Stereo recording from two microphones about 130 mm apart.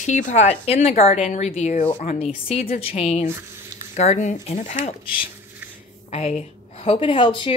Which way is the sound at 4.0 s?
65° left (ahead or behind).